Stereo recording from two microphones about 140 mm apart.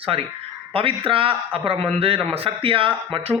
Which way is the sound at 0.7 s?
40° right (ahead or behind).